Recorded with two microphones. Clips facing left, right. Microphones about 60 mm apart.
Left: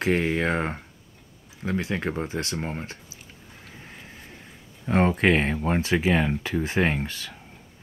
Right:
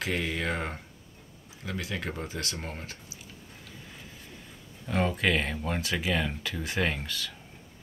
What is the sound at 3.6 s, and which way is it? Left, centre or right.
Vehicle, left.